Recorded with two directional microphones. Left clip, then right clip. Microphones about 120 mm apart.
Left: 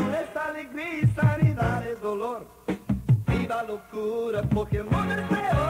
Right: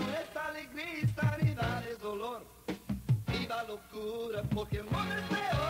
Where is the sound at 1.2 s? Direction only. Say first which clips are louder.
Left 8 dB; 25° left (ahead or behind).